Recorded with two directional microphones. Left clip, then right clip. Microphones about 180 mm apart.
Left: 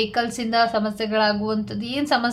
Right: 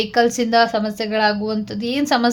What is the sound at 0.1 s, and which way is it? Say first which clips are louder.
A woman's voice: right 7 dB; 30° right (ahead or behind).